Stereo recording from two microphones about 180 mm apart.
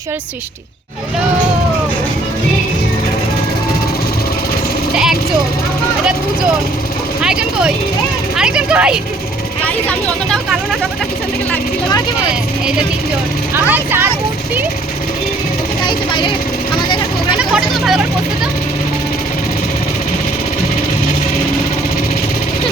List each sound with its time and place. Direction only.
7.2 s speech: 5° right (ahead or behind)
10.2 s speech: centre (ahead or behind)
13.7 s speech: 10° right (ahead or behind)
15.8 s speech: 25° left (ahead or behind)
17.3 s speech: 5° right (ahead or behind)